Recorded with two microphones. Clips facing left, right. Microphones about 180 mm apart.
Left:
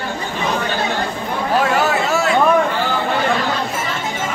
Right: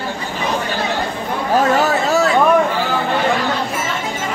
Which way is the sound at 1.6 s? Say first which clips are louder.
Right 3 dB; 40° right (ahead or behind).